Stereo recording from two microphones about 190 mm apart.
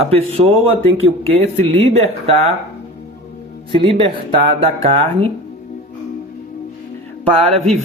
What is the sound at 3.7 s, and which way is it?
A man's voice, 30° right (ahead or behind).